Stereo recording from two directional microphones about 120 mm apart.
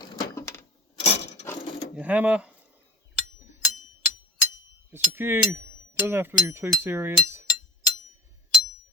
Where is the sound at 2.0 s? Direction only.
10° right (ahead or behind).